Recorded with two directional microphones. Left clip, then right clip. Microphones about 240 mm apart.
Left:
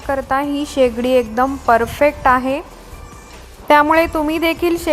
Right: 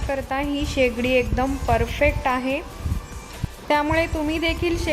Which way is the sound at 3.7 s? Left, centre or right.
Left.